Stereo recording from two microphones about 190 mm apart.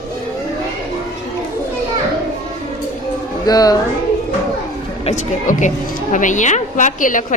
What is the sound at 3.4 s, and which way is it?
Speech, 20° left (ahead or behind).